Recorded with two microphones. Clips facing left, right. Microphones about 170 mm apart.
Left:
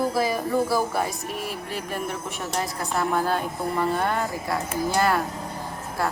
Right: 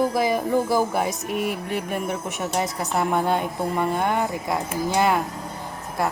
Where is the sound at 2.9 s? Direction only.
20° right (ahead or behind).